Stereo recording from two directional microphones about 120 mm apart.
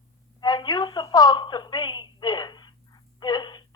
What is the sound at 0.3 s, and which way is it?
Telephone, 35° left (ahead or behind).